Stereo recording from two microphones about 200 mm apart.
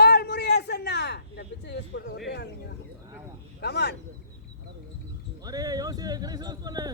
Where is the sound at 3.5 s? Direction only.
55° left (ahead or behind).